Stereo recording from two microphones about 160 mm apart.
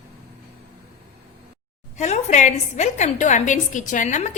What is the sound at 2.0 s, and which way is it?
A woman's voice, 45° left (ahead or behind).